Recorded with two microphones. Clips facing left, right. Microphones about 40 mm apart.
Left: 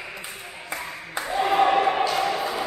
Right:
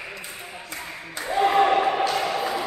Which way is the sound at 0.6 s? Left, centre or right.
Centre.